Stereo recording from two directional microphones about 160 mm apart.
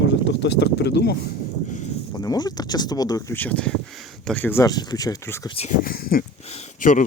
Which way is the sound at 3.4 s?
10° left (ahead or behind).